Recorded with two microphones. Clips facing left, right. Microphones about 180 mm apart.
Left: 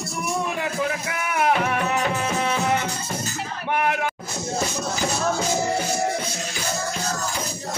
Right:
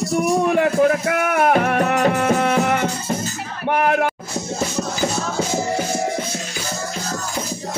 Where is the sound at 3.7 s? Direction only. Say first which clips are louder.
Right 6 dB; 45° right (ahead or behind).